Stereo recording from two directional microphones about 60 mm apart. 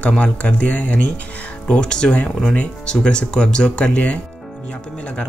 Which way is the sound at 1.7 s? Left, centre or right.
Centre.